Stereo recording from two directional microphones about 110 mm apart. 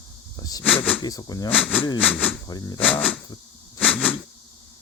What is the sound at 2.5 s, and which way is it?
Speech, 35° left (ahead or behind).